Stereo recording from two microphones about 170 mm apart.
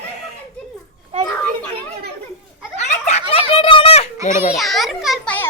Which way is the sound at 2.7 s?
40° left (ahead or behind).